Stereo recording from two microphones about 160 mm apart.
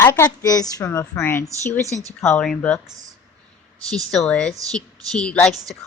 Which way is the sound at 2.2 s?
5° left (ahead or behind).